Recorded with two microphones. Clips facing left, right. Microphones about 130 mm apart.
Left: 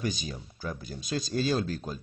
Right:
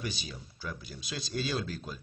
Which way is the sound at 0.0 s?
45° left (ahead or behind).